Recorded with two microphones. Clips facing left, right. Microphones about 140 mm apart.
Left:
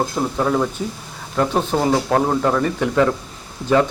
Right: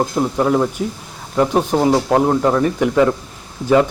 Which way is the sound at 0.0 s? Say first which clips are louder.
Right 3 dB; 10° right (ahead or behind).